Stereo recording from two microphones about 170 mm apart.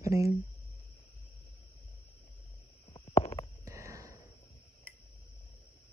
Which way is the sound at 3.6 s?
15° right (ahead or behind).